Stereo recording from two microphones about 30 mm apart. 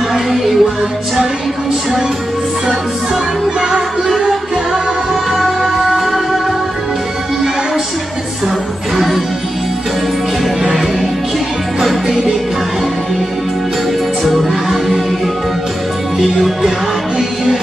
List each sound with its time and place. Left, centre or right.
0.1 s music: centre
3.6 s music: right
5.4 s music: centre
14.5 s music: centre
16.2 s music: centre